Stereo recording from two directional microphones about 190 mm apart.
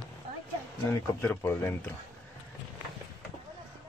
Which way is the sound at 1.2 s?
10° left (ahead or behind).